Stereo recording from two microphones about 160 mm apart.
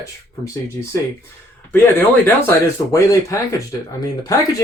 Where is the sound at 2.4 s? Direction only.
20° left (ahead or behind).